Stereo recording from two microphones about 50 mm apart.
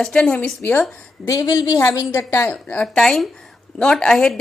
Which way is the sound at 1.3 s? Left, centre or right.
Left.